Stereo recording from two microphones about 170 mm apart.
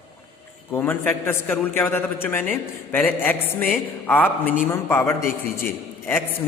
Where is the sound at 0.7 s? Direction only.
10° left (ahead or behind).